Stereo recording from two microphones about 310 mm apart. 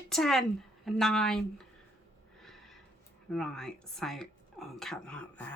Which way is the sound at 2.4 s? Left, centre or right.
Centre.